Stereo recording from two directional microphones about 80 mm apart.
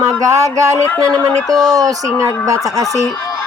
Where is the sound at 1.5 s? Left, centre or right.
Right.